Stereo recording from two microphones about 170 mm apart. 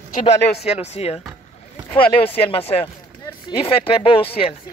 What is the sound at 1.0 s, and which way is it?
Speech, 35° left (ahead or behind).